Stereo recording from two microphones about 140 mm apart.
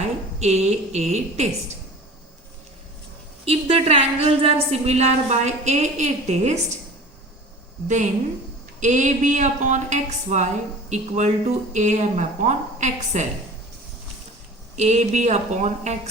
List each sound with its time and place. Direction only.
0.3 s a woman's voice: 50° right (ahead or behind)
3.4 s a woman's voice: 45° right (ahead or behind)
8.8 s a woman's voice: 60° right (ahead or behind)
14.8 s a woman's voice: 55° right (ahead or behind)